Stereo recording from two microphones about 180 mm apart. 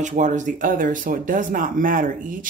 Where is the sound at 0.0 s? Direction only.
45° right (ahead or behind).